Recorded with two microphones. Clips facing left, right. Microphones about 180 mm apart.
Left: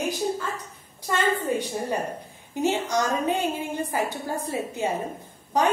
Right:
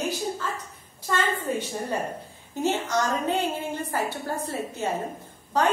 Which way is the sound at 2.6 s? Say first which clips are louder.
Left 1 dB; 15° left (ahead or behind).